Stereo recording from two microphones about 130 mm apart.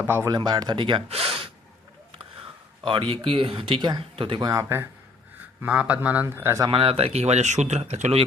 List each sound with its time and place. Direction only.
0.0 s speech: 15° right (ahead or behind)
0.3 s speech: 35° right (ahead or behind)
5.6 s speech: 10° right (ahead or behind)
6.7 s speech: 45° right (ahead or behind)